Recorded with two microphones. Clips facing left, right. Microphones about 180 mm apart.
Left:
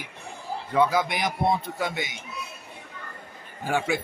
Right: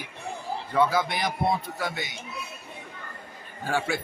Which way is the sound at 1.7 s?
20° left (ahead or behind).